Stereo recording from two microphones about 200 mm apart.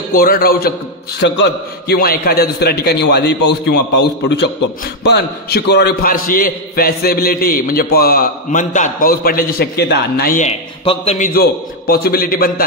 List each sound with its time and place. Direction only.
0.1 s a man's voice: 45° left (ahead or behind)